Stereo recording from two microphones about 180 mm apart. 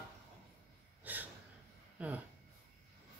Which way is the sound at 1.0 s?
10° right (ahead or behind).